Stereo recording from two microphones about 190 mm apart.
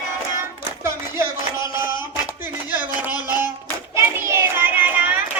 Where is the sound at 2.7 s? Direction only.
10° right (ahead or behind).